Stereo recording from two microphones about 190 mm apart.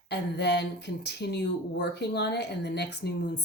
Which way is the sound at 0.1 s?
60° left (ahead or behind).